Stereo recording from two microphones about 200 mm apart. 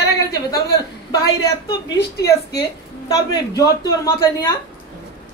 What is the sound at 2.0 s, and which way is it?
Speech, 55° left (ahead or behind).